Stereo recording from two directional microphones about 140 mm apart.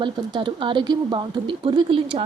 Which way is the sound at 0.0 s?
35° right (ahead or behind).